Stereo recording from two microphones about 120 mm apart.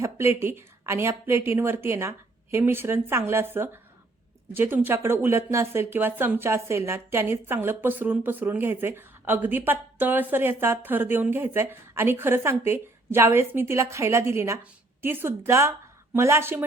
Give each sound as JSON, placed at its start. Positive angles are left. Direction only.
{"t": 0.0, "sound": "a woman's voice", "side_deg": -20}